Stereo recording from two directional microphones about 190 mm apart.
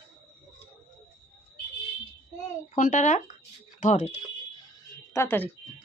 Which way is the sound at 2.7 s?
40° left (ahead or behind).